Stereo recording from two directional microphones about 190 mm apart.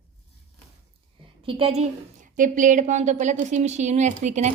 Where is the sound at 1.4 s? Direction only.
30° right (ahead or behind).